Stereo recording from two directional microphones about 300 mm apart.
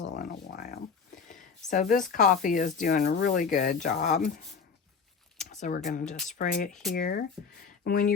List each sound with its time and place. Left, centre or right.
0.0 s a sound: left
1.7 s speech: left
5.4 s speech: left
7.4 s speech: centre
7.9 s speech: left